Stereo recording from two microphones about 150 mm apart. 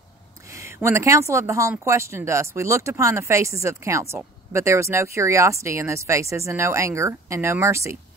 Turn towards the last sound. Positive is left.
turn(degrees=-20)  # may be behind; listen again after turning